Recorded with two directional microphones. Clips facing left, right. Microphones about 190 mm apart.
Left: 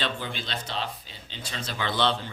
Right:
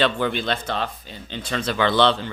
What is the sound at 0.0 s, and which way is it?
Speech, 65° right (ahead or behind).